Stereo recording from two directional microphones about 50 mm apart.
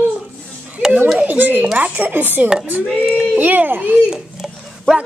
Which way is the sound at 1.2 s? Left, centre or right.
Right.